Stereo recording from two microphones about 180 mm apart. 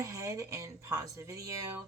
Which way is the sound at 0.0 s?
15° right (ahead or behind).